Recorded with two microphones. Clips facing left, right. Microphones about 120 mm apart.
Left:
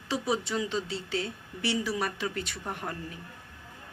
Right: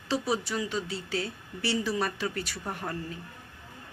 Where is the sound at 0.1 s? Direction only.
20° left (ahead or behind).